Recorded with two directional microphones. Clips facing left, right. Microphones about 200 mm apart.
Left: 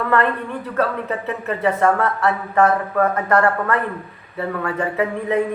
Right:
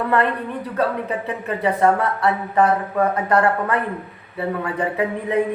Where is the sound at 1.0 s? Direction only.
15° right (ahead or behind).